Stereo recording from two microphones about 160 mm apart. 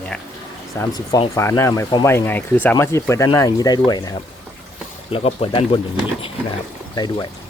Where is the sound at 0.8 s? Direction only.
25° left (ahead or behind).